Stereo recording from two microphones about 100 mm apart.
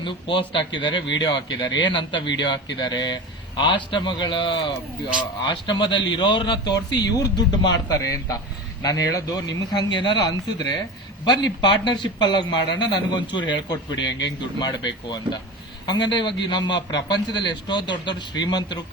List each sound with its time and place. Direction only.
0.0 s speech: 55° left (ahead or behind)
11.4 s speech: 50° left (ahead or behind)